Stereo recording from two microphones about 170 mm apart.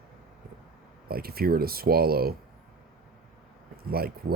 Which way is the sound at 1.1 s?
65° right (ahead or behind).